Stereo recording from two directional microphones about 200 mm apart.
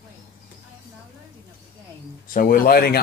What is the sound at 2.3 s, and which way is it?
Speech, 45° left (ahead or behind).